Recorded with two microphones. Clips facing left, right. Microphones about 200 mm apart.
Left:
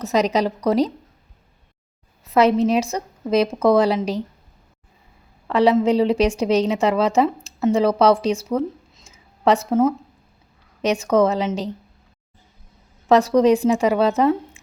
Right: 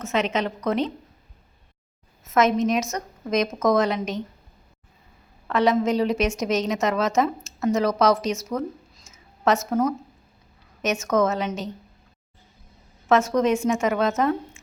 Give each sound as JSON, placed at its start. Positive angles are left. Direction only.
{"t": 0.0, "sound": "a woman's voice", "side_deg": 35}
{"t": 2.2, "sound": "a woman's voice", "side_deg": 30}
{"t": 5.5, "sound": "a woman's voice", "side_deg": 30}
{"t": 13.1, "sound": "a woman's voice", "side_deg": 35}